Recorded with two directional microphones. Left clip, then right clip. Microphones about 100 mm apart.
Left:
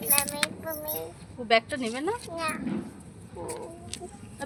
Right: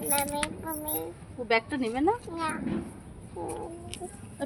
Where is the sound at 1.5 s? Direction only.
5° right (ahead or behind).